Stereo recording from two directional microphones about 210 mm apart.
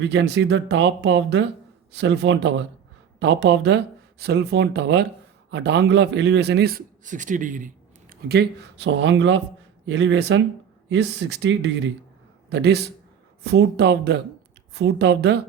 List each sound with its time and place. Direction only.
0.0 s a man's voice: 55° right (ahead or behind); by 7.7 s 40° right (ahead or behind)
8.1 s a man's voice: 50° right (ahead or behind)